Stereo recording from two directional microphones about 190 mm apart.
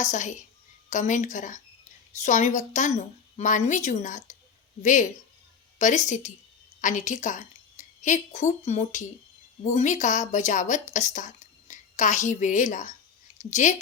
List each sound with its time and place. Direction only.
0.0 s a woman's voice: 40° left (ahead or behind)